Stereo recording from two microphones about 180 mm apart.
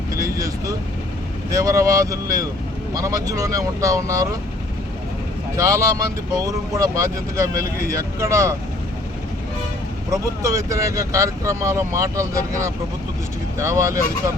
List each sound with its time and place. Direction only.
0.1 s speech: 20° right (ahead or behind)
5.5 s speech: 15° right (ahead or behind)
10.1 s speech: 20° right (ahead or behind)